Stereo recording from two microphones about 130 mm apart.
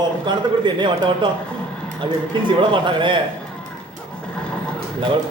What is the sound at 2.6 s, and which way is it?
Speech, 40° right (ahead or behind).